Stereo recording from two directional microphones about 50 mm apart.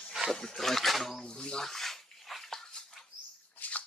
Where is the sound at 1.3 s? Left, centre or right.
Centre.